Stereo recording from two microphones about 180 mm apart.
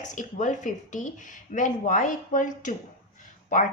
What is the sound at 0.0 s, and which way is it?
A woman's voice, 45° left (ahead or behind).